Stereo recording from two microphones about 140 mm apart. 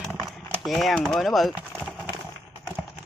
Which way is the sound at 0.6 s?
Centre (ahead or behind).